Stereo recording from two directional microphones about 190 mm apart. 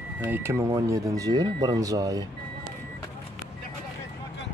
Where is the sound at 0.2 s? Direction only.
10° right (ahead or behind).